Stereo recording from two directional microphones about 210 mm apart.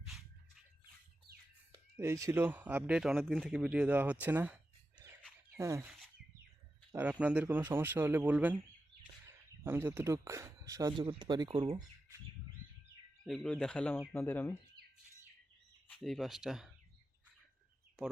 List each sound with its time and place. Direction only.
1.3 s bird: 45° right (ahead or behind)
2.0 s speech: 15° right (ahead or behind)
6.9 s speech: 5° right (ahead or behind)
9.6 s speech: 10° right (ahead or behind); by 11.8 s 30° right (ahead or behind)
13.2 s speech: 5° left (ahead or behind)
15.9 s speech: centre (ahead or behind)